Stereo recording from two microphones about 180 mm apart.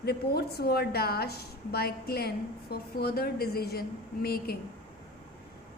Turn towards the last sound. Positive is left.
turn(degrees=60)  # may be behind; listen again after turning